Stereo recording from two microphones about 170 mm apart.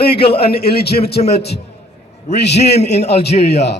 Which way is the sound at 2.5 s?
40° left (ahead or behind).